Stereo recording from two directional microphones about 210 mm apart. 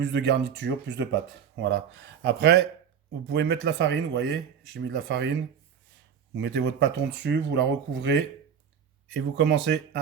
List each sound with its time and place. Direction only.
0.1 s speech: 55° right (ahead or behind)
6.4 s speech: 55° right (ahead or behind)